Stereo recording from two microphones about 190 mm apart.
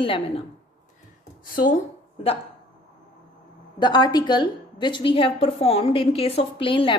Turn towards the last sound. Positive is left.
turn(degrees=25)  # may be behind; listen again after turning